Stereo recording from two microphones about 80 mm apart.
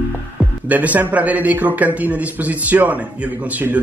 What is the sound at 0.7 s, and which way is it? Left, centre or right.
A man's voice, centre.